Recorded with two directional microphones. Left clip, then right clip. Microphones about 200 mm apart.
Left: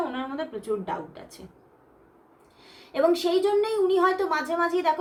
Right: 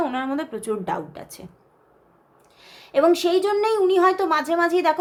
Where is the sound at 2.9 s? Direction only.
40° right (ahead or behind).